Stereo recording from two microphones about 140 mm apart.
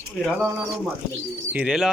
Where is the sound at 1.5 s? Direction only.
5° right (ahead or behind).